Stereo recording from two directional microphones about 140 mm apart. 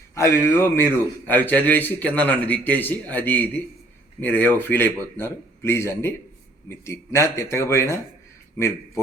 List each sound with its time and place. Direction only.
0.1 s a man's voice: 20° left (ahead or behind)